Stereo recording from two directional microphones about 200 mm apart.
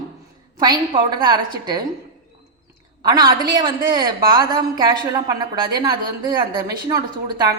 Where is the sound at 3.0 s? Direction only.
20° right (ahead or behind).